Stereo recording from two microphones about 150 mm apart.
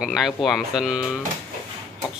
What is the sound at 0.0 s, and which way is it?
Speech, centre (ahead or behind).